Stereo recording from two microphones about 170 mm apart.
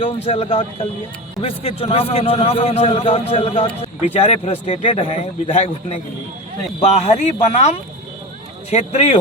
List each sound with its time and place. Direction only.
0.0 s a man's voice: 35° left (ahead or behind)